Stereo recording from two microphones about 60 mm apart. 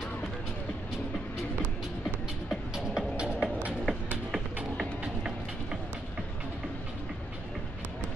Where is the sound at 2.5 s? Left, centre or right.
Centre.